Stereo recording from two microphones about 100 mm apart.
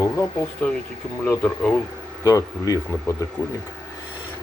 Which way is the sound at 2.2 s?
35° left (ahead or behind).